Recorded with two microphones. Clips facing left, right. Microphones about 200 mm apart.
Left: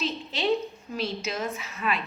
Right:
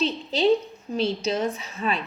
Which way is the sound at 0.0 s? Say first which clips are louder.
Right 6 dB; 30° right (ahead or behind).